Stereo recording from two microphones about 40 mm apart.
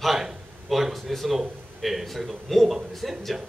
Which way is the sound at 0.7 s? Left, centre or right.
Centre.